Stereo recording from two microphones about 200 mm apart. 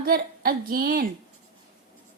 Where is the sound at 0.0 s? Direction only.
45° right (ahead or behind).